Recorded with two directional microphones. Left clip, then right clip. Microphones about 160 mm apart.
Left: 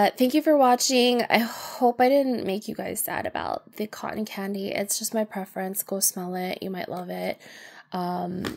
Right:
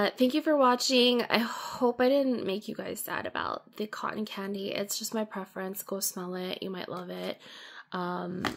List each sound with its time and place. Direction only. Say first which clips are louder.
0.0 s speech: left 6 dB; 15° left (ahead or behind)